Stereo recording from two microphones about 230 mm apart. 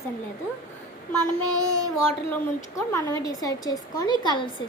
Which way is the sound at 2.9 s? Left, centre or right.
Centre.